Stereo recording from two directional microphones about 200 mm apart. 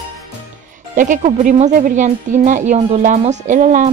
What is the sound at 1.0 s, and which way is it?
A woman's voice, 40° right (ahead or behind).